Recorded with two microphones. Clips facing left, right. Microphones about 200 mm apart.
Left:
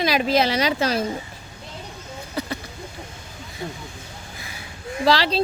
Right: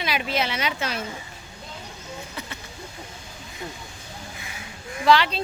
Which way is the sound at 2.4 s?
40° left (ahead or behind).